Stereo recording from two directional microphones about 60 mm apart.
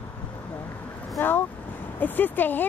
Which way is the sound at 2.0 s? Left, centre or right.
Left.